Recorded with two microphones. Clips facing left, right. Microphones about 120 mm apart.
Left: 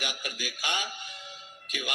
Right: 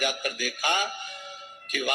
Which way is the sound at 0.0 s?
50° right (ahead or behind).